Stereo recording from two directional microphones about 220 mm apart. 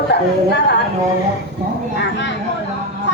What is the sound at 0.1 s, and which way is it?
Speech, 50° left (ahead or behind).